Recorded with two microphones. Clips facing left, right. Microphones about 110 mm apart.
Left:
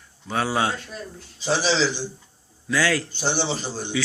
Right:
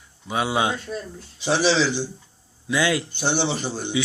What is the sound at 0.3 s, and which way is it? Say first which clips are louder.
Speech: right 1 dB; 15° right (ahead or behind).